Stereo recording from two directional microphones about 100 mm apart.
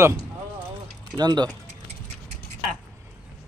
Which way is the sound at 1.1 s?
45° right (ahead or behind).